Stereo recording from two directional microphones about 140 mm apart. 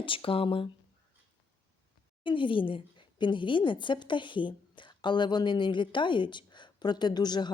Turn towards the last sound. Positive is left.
turn(degrees=30)  # may be behind; listen again after turning